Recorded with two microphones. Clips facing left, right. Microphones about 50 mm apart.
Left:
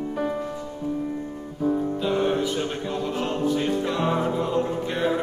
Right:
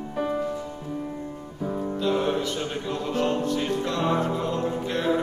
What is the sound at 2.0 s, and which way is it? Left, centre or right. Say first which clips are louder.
Music: left 1 dB; centre.